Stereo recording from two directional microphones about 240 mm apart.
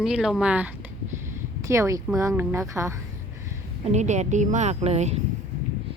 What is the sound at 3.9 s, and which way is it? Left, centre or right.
A woman's voice, right.